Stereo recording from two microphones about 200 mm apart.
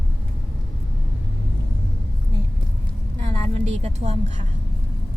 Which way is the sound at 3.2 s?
35° right (ahead or behind).